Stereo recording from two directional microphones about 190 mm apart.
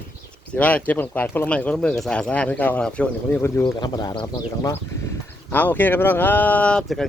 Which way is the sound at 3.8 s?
20° left (ahead or behind).